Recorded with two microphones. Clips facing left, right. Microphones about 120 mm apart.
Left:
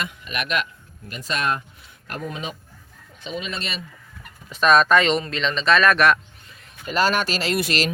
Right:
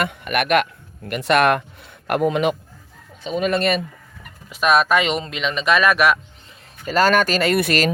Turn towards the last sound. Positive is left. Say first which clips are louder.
# right 5 dB
turn(degrees=-50)  # may be behind; listen again after turning